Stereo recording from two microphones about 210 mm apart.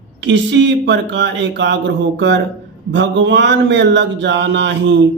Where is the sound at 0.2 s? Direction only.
55° right (ahead or behind).